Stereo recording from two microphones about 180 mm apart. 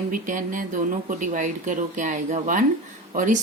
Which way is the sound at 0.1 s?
45° right (ahead or behind).